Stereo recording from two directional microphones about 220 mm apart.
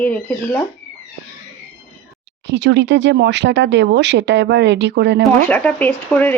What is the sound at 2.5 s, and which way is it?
Speech, 50° right (ahead or behind).